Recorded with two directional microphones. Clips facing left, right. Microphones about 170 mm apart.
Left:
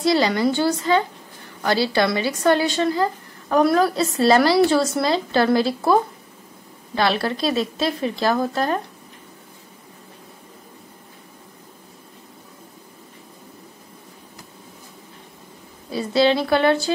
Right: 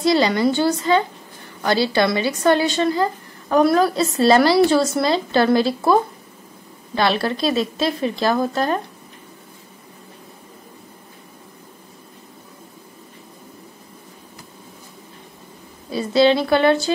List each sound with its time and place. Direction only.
0.0 s speech: 20° right (ahead or behind)
7.0 s speech: 25° right (ahead or behind)
15.9 s speech: 20° right (ahead or behind)